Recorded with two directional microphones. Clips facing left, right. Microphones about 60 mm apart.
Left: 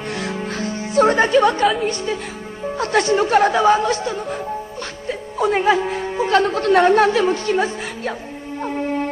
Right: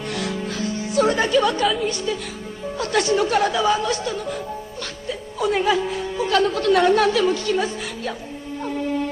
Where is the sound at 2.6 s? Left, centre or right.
Left.